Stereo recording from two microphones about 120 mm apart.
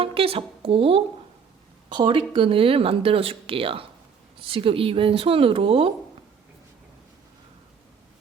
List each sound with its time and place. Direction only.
0.0 s a woman's voice: 50° right (ahead or behind)